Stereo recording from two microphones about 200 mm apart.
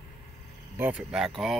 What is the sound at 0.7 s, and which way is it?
Speech, 5° right (ahead or behind).